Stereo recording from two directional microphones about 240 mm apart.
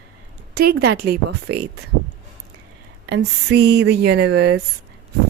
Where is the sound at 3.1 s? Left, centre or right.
Right.